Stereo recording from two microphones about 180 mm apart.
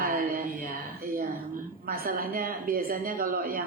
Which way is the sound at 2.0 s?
55° right (ahead or behind).